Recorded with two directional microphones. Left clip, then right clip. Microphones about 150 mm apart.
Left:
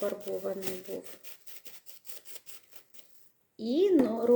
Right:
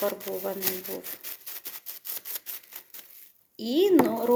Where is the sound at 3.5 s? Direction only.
15° left (ahead or behind).